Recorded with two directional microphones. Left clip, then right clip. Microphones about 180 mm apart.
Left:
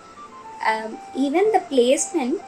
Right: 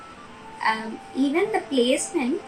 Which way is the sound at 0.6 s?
20° left (ahead or behind).